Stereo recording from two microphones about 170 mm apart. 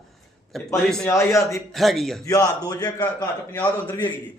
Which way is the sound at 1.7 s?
Centre (ahead or behind).